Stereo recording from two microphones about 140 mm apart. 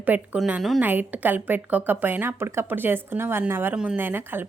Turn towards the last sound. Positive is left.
turn(degrees=-15)  # may be behind; listen again after turning